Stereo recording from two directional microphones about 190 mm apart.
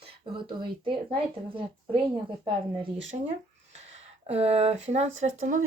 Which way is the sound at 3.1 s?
40° right (ahead or behind).